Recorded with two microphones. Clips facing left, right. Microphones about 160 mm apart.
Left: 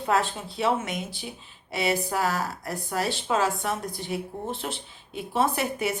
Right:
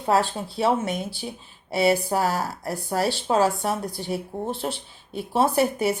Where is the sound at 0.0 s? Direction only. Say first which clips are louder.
Right 3 dB; 35° right (ahead or behind).